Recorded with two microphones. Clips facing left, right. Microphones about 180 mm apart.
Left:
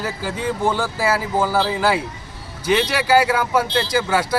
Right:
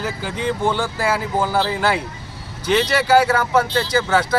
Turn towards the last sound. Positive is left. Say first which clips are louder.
# right 1 dB
turn(degrees=10)  # may be behind; listen again after turning